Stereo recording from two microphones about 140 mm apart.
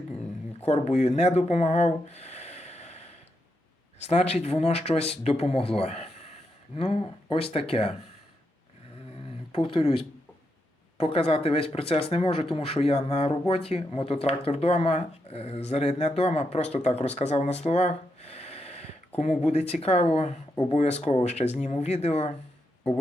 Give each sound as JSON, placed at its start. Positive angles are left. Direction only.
{"t": 0.6, "sound": "speech", "side_deg": 50}
{"t": 9.5, "sound": "speech", "side_deg": 40}